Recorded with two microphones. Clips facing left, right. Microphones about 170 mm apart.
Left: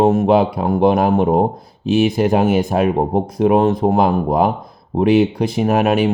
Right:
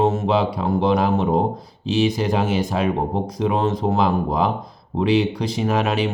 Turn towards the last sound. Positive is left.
turn(degrees=55)  # may be behind; listen again after turning